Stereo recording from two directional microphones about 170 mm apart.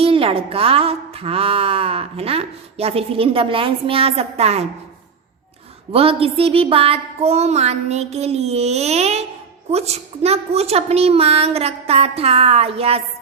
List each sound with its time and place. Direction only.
0.0 s a woman's voice: 35° right (ahead or behind)
5.9 s a woman's voice: 35° right (ahead or behind)